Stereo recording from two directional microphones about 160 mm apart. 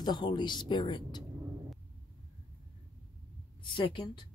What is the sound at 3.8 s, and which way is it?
Speech, 30° left (ahead or behind).